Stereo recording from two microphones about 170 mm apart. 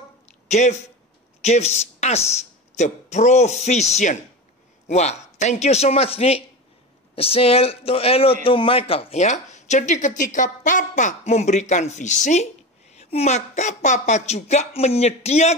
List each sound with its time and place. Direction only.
0.5 s a woman's voice: 45° left (ahead or behind)